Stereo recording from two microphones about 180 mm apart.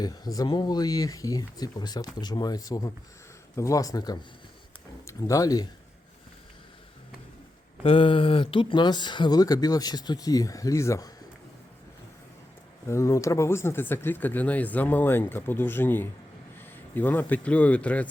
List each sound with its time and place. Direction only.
0.0 s speech: 20° left (ahead or behind)
7.9 s speech: 30° left (ahead or behind)
12.9 s a man's voice: 15° left (ahead or behind)